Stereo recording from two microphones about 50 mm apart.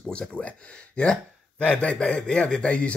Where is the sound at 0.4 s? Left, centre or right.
Left.